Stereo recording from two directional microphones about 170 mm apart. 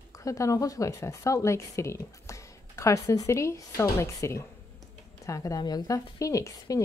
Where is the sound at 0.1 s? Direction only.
20° left (ahead or behind).